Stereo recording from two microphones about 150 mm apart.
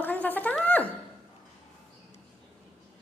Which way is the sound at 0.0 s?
10° left (ahead or behind).